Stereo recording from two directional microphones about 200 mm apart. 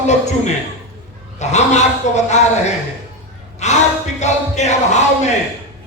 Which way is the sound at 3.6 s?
35° left (ahead or behind).